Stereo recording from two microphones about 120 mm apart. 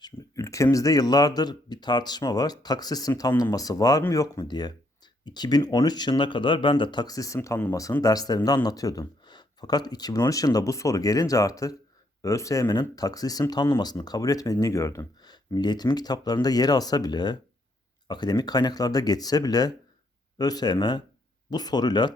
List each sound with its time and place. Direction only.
0.0 s speech: 25° left (ahead or behind)
15.3 s speech: 35° left (ahead or behind)